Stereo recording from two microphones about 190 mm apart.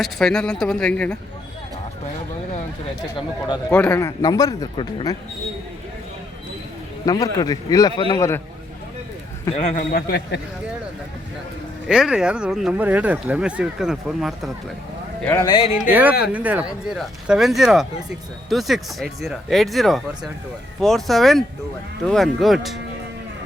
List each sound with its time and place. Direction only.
0.0 s speech: centre (ahead or behind)
3.7 s speech: 10° left (ahead or behind)
7.0 s a man's voice: 20° left (ahead or behind)
9.5 s a man's voice: 35° left (ahead or behind)
9.9 s speech: 55° left (ahead or behind)
11.9 s speech: 5° right (ahead or behind)
15.2 s speech: 10° left (ahead or behind)
15.4 s a man's voice: 25° left (ahead or behind)
15.9 s speech: 10° right (ahead or behind)